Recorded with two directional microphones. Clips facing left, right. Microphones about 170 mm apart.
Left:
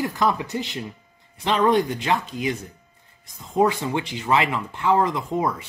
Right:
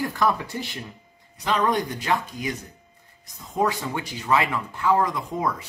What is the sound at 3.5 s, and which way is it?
Speech, 20° left (ahead or behind).